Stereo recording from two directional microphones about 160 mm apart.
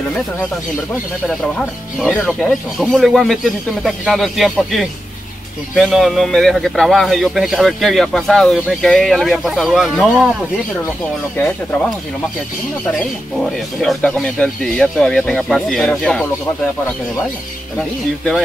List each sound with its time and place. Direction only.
1.2 s speech: 5° left (ahead or behind)
11.3 s speech: 10° left (ahead or behind)
13.4 s speech: centre (ahead or behind)
17.7 s speech: centre (ahead or behind)